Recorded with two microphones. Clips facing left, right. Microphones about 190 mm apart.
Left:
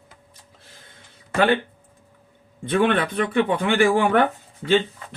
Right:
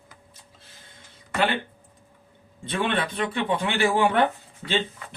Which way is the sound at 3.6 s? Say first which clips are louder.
Left 2 dB; 50° left (ahead or behind).